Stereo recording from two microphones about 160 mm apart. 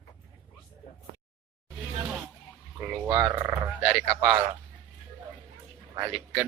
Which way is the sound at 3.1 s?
20° right (ahead or behind).